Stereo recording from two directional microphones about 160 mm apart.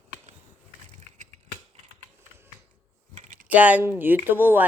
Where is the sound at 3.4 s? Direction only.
10° right (ahead or behind).